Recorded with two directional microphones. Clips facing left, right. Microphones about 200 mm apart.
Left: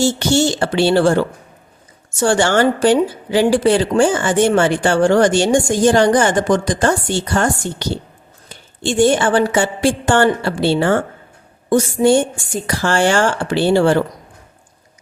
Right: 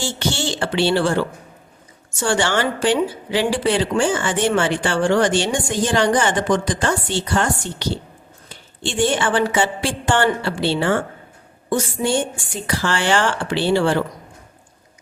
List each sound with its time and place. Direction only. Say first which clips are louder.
0.0 s a woman's voice: left 9 dB; 40° left (ahead or behind)